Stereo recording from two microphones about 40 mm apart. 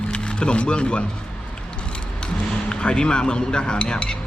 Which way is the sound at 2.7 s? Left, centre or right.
Left.